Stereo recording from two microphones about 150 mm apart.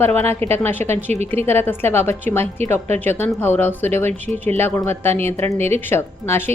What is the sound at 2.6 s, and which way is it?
Speech, 45° right (ahead or behind).